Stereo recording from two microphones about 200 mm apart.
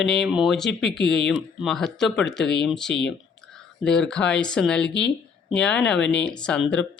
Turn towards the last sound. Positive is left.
turn(degrees=5)  # may be behind; listen again after turning